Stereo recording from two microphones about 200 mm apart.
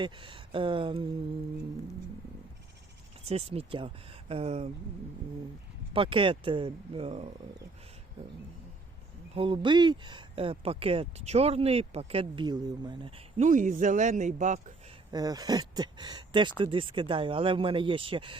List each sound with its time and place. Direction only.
0.0 s speech: 25° right (ahead or behind)
3.2 s speech: 30° right (ahead or behind)
5.9 s speech: 25° right (ahead or behind)
9.3 s speech: 25° right (ahead or behind)
15.1 s speech: 20° right (ahead or behind)